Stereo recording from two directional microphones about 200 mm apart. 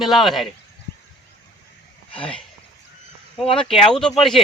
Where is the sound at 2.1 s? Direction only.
25° left (ahead or behind).